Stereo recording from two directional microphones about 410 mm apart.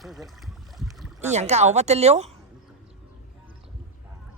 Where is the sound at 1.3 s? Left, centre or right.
Centre.